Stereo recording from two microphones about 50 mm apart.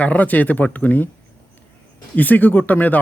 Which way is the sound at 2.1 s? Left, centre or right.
Left.